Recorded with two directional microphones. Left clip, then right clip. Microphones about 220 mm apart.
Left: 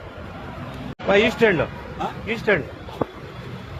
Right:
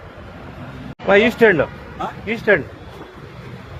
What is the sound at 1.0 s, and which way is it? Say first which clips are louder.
Speech: right 4 dB; 45° right (ahead or behind).